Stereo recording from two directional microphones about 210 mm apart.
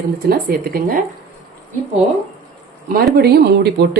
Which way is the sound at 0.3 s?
45° right (ahead or behind).